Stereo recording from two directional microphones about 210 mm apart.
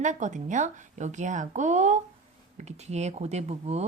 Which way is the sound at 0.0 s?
35° right (ahead or behind).